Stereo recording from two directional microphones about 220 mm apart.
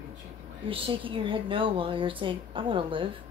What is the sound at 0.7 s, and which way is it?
A woman's voice, 25° right (ahead or behind).